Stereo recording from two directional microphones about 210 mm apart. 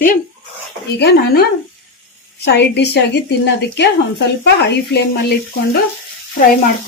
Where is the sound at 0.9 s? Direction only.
50° left (ahead or behind).